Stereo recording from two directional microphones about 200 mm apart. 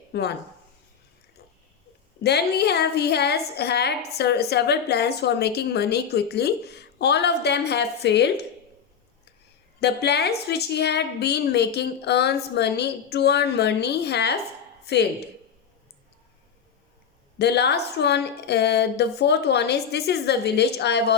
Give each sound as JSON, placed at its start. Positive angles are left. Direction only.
{"t": 0.1, "sound": "speech", "side_deg": 55}
{"t": 2.2, "sound": "a woman's voice", "side_deg": 55}
{"t": 9.8, "sound": "a woman's voice", "side_deg": 55}
{"t": 17.3, "sound": "a woman's voice", "side_deg": 55}